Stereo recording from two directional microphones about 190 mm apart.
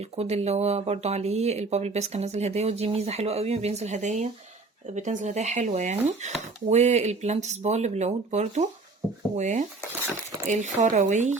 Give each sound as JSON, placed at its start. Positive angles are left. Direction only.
{"t": 0.0, "sound": "speech", "side_deg": -35}